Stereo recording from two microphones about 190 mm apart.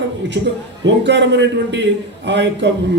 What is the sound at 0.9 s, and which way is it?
A man's voice, 65° right (ahead or behind).